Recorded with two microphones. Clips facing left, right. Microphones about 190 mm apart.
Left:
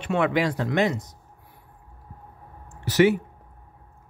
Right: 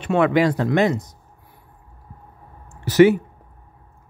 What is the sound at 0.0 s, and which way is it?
Speech, 45° right (ahead or behind).